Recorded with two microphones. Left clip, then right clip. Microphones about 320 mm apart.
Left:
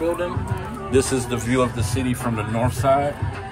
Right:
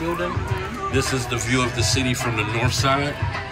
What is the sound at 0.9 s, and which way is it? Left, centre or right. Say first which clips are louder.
Speech: left 4 dB; left.